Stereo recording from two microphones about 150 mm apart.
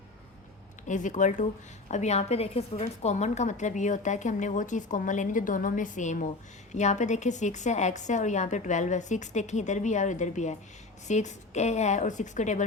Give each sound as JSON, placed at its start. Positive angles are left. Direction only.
{"t": 0.9, "sound": "a woman's voice", "side_deg": 55}